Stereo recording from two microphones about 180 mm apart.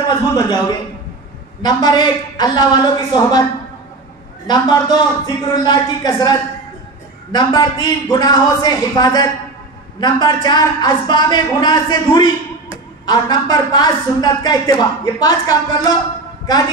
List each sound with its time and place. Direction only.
0.3 s a woman's voice: 25° left (ahead or behind)
4.5 s a woman's voice: 25° left (ahead or behind)
7.3 s a woman's voice: 25° left (ahead or behind)